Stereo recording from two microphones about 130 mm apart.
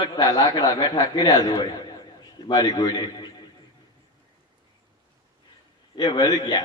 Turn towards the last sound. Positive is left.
turn(degrees=30)  # may be behind; listen again after turning